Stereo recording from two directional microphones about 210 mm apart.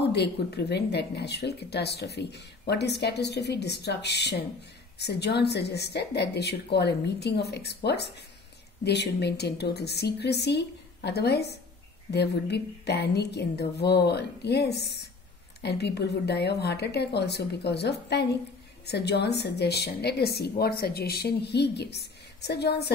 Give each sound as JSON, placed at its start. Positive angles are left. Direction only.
{"t": 0.1, "sound": "speech", "side_deg": 50}